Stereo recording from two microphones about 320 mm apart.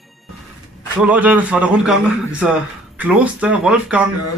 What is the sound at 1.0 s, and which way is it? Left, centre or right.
Speech, centre.